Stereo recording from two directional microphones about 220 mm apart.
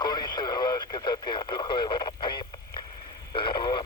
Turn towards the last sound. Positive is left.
turn(degrees=20)  # may be behind; listen again after turning